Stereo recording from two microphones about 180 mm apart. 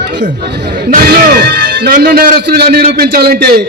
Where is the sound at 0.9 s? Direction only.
55° right (ahead or behind).